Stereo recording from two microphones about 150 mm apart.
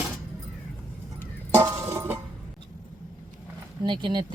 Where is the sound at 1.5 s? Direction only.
20° right (ahead or behind).